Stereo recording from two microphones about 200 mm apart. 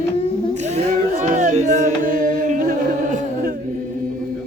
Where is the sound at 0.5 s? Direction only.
35° right (ahead or behind).